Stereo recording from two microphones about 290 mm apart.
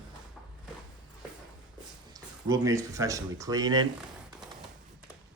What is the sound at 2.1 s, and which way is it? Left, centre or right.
Speech, centre.